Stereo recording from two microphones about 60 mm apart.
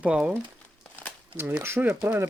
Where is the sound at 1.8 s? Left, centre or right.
Right.